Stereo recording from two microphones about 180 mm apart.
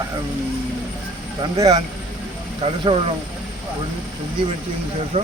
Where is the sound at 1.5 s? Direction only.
20° right (ahead or behind).